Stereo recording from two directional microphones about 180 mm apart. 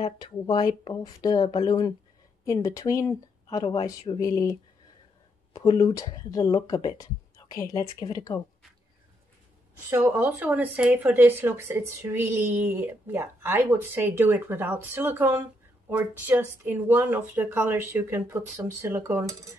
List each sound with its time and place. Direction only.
0.0 s speech: 25° left (ahead or behind)
9.8 s speech: 10° right (ahead or behind)